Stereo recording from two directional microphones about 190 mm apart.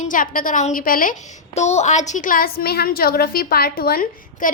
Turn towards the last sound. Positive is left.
turn(degrees=50)  # may be behind; listen again after turning